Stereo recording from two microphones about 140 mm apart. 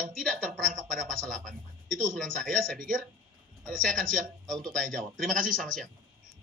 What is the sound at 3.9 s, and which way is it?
Speech, 75° right (ahead or behind).